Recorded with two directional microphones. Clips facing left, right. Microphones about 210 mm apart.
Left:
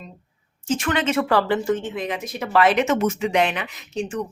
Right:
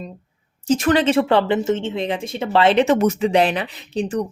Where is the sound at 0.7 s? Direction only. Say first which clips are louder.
Right 6 dB; 35° right (ahead or behind).